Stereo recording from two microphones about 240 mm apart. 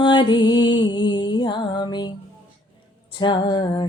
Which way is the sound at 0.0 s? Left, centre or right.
Centre.